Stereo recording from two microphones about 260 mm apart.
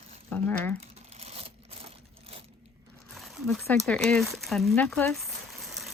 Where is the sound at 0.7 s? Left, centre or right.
Right.